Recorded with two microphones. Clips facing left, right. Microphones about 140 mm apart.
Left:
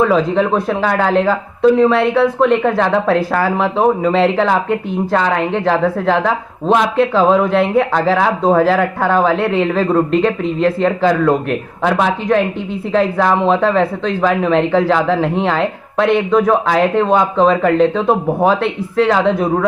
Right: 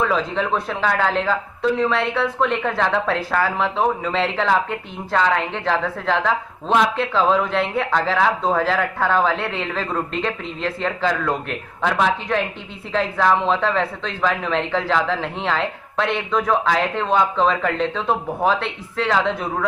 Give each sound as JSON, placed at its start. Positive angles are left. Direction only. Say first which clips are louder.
{"t": 0.0, "sound": "speech", "louder": "left 8 dB", "side_deg": 45}
{"t": 11.1, "sound": "speech", "louder": "left 9 dB", "side_deg": 35}
{"t": 11.8, "sound": "speech", "louder": "left 3 dB", "side_deg": 45}